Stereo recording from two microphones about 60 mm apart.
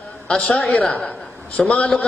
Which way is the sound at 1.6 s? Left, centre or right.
Centre.